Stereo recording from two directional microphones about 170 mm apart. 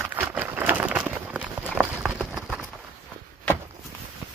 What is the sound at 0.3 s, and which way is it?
Clip-clop, 10° right (ahead or behind).